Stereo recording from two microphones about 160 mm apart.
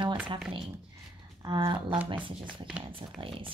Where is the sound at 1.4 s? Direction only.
30° right (ahead or behind).